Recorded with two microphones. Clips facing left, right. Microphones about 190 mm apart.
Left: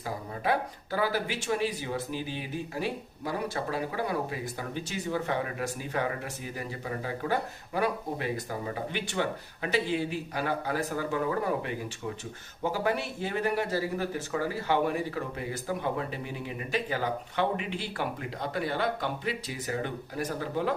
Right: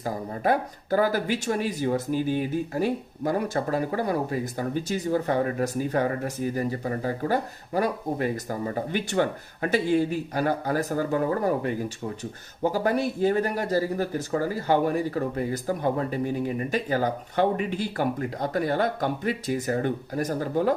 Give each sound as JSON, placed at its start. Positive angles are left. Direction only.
{"t": 0.0, "sound": "speech", "side_deg": -45}